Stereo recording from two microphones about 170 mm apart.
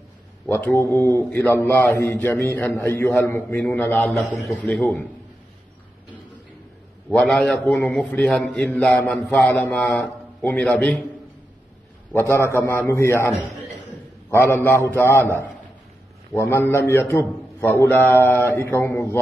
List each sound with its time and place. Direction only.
0.5 s a man's voice: 10° left (ahead or behind)
7.1 s a man's voice: 5° left (ahead or behind)
12.1 s a man's voice: 15° left (ahead or behind)
14.3 s a man's voice: 15° left (ahead or behind)